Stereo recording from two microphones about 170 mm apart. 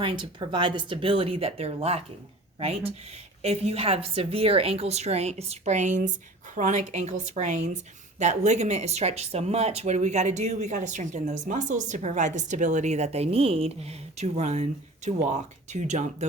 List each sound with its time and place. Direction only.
0.0 s a woman's voice: 30° right (ahead or behind)